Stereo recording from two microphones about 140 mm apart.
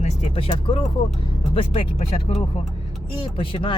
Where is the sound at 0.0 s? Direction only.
45° left (ahead or behind).